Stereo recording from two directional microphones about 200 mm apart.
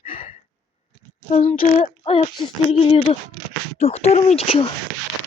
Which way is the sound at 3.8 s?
30° left (ahead or behind).